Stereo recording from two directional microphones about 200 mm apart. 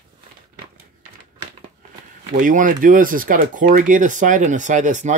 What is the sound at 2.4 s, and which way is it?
Speech, 40° right (ahead or behind).